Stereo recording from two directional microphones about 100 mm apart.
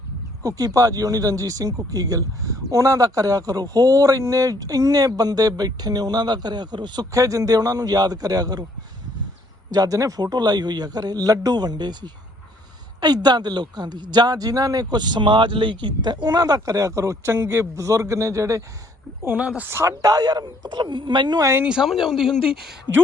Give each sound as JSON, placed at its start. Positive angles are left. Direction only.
{"t": 0.4, "sound": "speech", "side_deg": -35}
{"t": 7.1, "sound": "speech", "side_deg": -35}
{"t": 9.7, "sound": "speech", "side_deg": -35}
{"t": 19.2, "sound": "speech", "side_deg": -20}
{"t": 21.6, "sound": "speech", "side_deg": -10}